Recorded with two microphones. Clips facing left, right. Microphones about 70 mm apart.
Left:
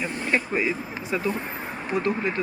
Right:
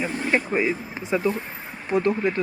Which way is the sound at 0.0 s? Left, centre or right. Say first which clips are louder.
Right 2 dB; right.